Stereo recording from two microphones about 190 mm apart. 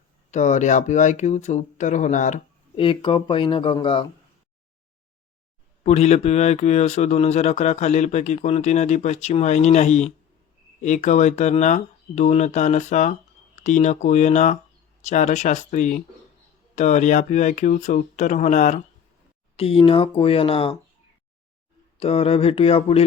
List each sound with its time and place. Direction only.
0.3 s speech: 40° left (ahead or behind)
2.7 s speech: 30° left (ahead or behind)
5.8 s speech: 35° left (ahead or behind)
21.9 s speech: 30° left (ahead or behind)